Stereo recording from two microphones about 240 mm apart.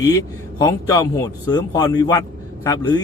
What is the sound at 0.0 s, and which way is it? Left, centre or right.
A man's voice, centre.